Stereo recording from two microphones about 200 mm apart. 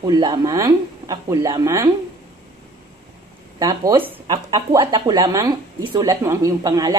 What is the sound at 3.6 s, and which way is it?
Speech, 20° right (ahead or behind).